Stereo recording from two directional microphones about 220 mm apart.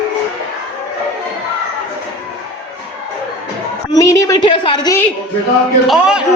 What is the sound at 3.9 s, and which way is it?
A woman's voice, 15° left (ahead or behind).